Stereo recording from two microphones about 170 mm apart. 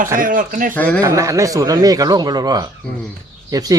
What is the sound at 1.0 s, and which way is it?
Speech, 20° right (ahead or behind).